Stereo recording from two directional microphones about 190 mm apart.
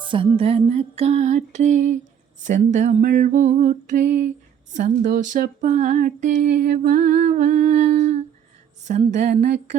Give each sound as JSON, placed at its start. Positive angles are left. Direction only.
{"t": 0.0, "sound": "female singing", "side_deg": -25}